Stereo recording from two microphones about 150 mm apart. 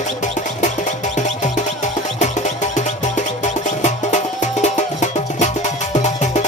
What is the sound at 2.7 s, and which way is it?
Music, 55° left (ahead or behind).